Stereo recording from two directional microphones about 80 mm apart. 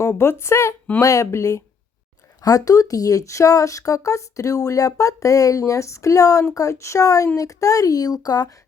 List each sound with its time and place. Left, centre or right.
0.0 s a woman's voice: left
2.4 s speech: left